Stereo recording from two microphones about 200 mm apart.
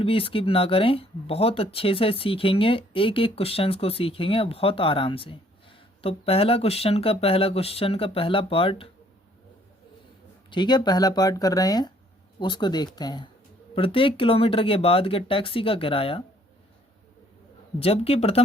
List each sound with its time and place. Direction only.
0.0 s speech: 30° left (ahead or behind)
10.5 s speech: 20° left (ahead or behind)
17.7 s speech: 30° left (ahead or behind)